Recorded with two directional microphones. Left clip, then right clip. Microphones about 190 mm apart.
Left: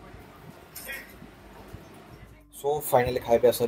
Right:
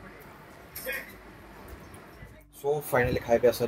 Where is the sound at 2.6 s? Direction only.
10° left (ahead or behind).